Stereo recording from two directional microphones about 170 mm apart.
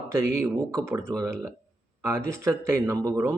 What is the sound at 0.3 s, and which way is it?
Speech, 15° right (ahead or behind).